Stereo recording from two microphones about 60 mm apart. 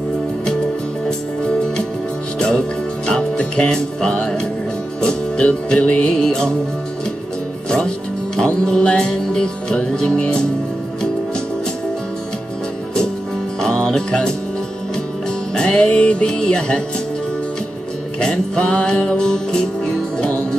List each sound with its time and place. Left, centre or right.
1.4 s music: centre
8.4 s music: centre
13.6 s music: centre
15.5 s music: centre
18.2 s music: centre